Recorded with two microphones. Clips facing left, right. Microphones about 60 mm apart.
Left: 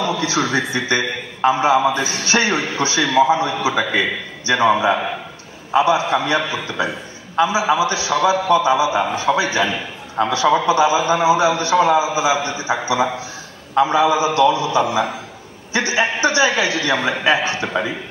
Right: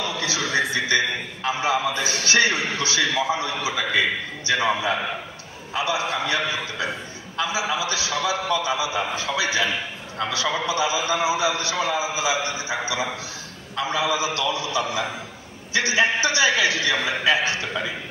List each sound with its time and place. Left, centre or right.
0.0 s a man's voice: left
5.8 s a man's voice: left